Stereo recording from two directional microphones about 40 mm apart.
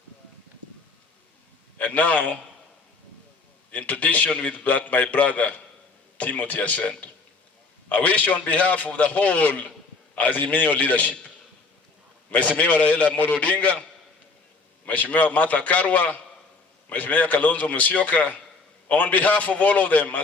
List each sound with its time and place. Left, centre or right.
1.8 s a man's voice: left
3.7 s a man's voice: left
12.3 s a man's voice: left
14.8 s a man's voice: left